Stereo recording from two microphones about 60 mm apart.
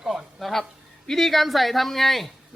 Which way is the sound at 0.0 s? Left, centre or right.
Centre.